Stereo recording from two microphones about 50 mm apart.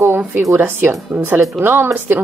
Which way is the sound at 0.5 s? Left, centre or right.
Right.